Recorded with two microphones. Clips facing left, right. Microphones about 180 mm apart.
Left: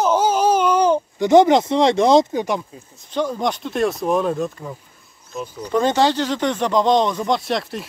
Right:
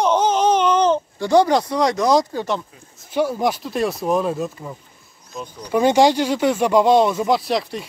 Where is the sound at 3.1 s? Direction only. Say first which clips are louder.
Right 2 dB; 10° right (ahead or behind).